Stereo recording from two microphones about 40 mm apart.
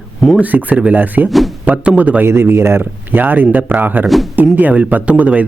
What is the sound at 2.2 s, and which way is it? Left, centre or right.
Speech, right.